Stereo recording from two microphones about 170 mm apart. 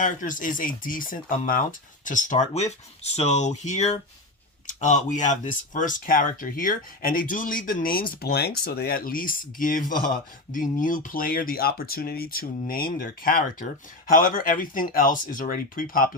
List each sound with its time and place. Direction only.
0.0 s speech: 50° left (ahead or behind)